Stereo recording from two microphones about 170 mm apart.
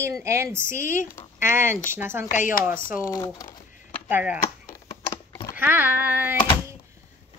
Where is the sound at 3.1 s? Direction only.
20° left (ahead or behind).